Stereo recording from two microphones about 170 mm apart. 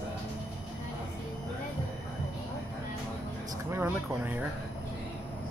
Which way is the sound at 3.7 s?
10° right (ahead or behind).